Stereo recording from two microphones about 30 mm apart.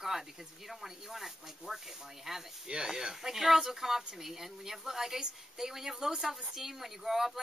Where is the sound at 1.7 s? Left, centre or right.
Right.